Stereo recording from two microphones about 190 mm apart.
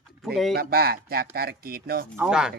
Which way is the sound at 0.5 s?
55° right (ahead or behind).